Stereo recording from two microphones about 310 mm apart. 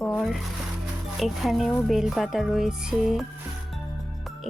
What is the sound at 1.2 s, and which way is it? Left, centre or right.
Speech, centre.